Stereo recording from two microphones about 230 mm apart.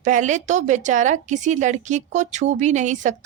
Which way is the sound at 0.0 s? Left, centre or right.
Right.